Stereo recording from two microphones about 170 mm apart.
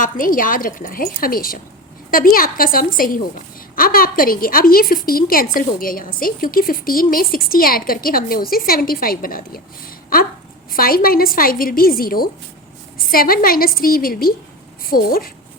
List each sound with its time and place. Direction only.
0.0 s a woman's voice: 55° left (ahead or behind)
10.7 s a woman's voice: 60° left (ahead or behind)